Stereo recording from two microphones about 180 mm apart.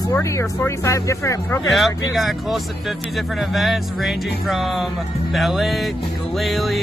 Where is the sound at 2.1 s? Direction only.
Centre (ahead or behind).